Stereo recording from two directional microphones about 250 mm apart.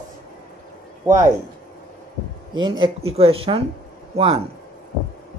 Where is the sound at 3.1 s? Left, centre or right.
Right.